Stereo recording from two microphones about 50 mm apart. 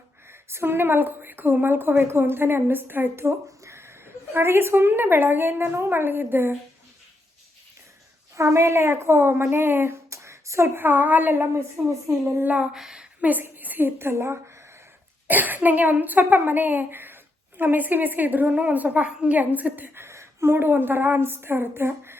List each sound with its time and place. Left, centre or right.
0.3 s a woman's voice: right
8.4 s a woman's voice: right
10.1 s a sound: right
10.8 s a woman's voice: right
12.7 s a woman's voice: centre
13.4 s a woman's voice: right
15.3 s a woman's voice: right
20.0 s a woman's voice: right